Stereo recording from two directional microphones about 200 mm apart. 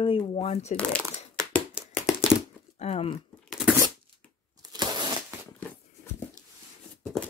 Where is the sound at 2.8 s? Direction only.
30° left (ahead or behind).